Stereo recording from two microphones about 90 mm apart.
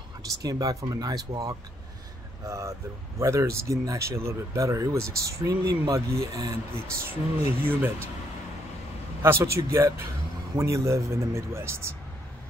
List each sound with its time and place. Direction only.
0.4 s speech: 45° right (ahead or behind)
7.6 s speech: 25° right (ahead or behind)
9.2 s speech: 30° right (ahead or behind)